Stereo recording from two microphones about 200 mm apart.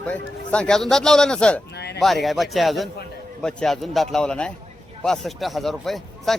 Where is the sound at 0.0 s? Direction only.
5° left (ahead or behind).